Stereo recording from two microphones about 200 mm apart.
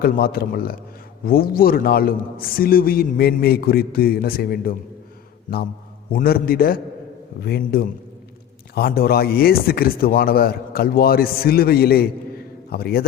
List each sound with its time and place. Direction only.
0.0 s a man's voice: 50° left (ahead or behind)
6.1 s a man's voice: 45° left (ahead or behind)